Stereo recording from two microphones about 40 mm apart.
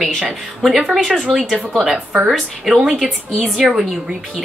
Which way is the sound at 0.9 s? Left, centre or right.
Centre.